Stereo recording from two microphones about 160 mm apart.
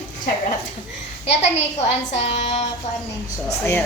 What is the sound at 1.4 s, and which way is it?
A child's voice, 45° left (ahead or behind).